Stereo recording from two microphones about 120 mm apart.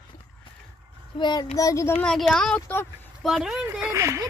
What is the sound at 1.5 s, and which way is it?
Speech, 25° left (ahead or behind).